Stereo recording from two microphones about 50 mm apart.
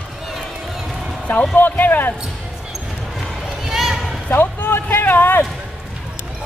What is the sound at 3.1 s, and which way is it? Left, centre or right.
Run, centre.